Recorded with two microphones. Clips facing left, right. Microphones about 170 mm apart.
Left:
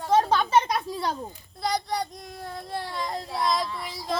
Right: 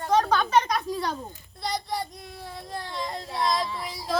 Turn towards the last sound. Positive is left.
turn(degrees=0)  # may be behind; listen again after turning